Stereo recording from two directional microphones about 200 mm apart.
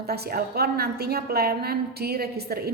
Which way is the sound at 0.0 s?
50° right (ahead or behind).